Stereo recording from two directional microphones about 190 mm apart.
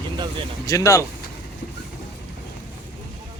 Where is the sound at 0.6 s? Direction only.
15° left (ahead or behind).